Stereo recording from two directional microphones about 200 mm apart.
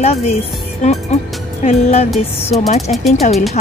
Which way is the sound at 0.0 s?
30° left (ahead or behind).